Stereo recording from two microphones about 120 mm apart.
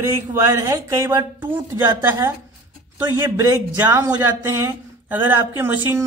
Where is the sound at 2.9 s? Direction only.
30° right (ahead or behind).